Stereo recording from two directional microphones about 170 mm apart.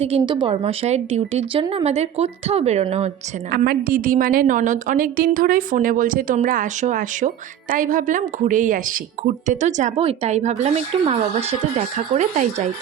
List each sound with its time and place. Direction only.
0.0 s a woman's voice: 30° right (ahead or behind)
3.5 s a woman's voice: 60° right (ahead or behind); by 12.7 s 45° right (ahead or behind)